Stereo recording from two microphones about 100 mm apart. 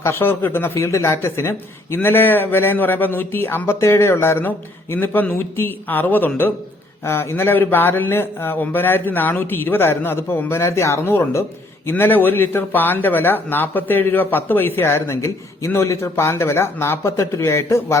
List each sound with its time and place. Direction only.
0.0 s speech: 25° left (ahead or behind)